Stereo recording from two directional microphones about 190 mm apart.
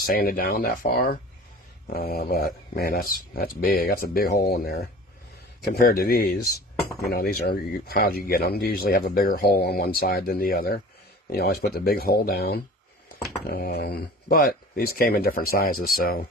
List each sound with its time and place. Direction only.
0.0 s speech: 50° left (ahead or behind)